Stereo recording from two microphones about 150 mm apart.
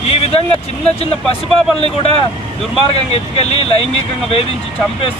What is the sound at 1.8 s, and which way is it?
Speech, 40° left (ahead or behind).